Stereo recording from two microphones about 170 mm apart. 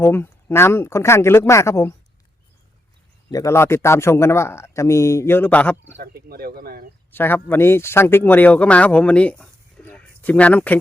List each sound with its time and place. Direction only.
0.0 s a man's voice: 15° left (ahead or behind)
3.3 s a man's voice: 15° left (ahead or behind)
6.0 s speech: 65° right (ahead or behind)
7.1 s speech: 10° left (ahead or behind)